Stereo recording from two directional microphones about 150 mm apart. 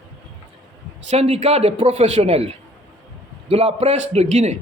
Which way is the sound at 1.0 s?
45° right (ahead or behind).